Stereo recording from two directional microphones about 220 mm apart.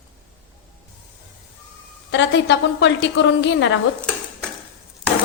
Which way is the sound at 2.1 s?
55° left (ahead or behind).